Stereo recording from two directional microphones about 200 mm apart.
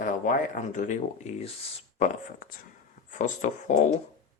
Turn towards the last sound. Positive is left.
turn(degrees=40)  # may be behind; listen again after turning